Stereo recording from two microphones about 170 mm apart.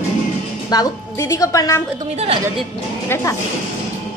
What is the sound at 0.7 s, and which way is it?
A woman's voice, 20° left (ahead or behind).